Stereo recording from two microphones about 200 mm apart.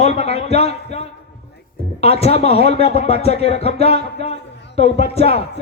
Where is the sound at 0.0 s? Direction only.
30° left (ahead or behind).